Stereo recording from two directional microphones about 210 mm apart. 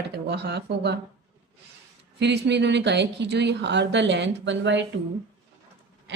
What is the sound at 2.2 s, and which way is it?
Speech, 55° right (ahead or behind).